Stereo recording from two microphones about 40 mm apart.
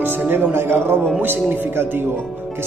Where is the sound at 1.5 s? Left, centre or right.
Right.